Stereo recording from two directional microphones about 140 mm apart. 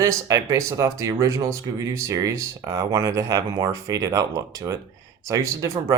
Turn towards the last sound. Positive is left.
turn(degrees=-25)  # may be behind; listen again after turning